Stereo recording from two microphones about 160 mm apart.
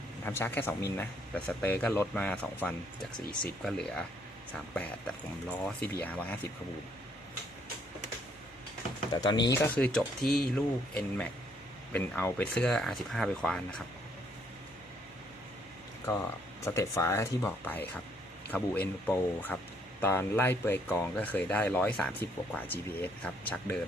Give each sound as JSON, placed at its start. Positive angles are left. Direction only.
{"t": 0.3, "sound": "speech", "side_deg": 15}
{"t": 9.1, "sound": "speech", "side_deg": 25}
{"t": 9.7, "sound": "speech", "side_deg": 5}
{"t": 16.6, "sound": "speech", "side_deg": 20}